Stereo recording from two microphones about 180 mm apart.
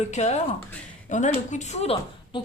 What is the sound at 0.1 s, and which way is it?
Speech, 40° left (ahead or behind).